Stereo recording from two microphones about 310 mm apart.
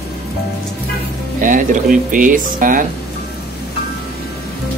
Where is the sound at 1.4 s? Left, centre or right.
Right.